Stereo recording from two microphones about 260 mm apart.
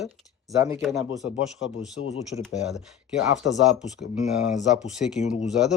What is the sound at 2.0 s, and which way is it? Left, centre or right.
Speech, left.